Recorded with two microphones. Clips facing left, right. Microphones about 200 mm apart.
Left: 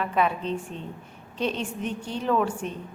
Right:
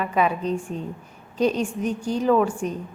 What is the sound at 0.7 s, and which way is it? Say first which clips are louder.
A woman's voice: right 6 dB; 40° right (ahead or behind).